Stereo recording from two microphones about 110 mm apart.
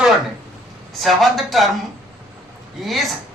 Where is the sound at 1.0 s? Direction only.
Centre (ahead or behind).